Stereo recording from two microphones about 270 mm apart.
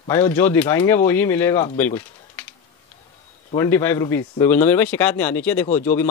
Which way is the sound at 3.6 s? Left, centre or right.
Centre.